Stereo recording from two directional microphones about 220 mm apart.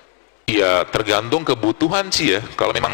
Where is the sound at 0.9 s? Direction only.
20° left (ahead or behind).